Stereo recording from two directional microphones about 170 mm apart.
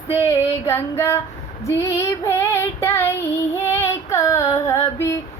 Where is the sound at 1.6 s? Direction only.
15° left (ahead or behind).